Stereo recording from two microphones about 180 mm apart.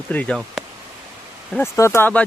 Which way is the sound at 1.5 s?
15° left (ahead or behind).